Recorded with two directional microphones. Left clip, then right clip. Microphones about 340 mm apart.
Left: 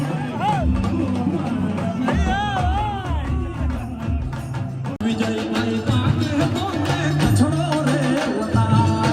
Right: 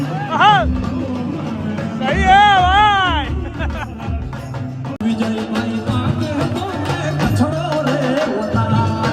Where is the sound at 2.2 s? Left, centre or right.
Right.